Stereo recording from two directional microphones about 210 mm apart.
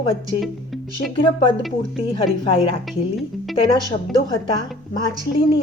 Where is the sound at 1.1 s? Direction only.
25° left (ahead or behind).